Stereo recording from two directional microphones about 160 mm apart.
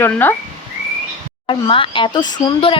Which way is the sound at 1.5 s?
30° left (ahead or behind).